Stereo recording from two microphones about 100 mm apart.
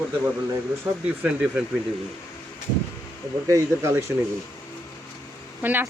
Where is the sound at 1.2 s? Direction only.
10° right (ahead or behind).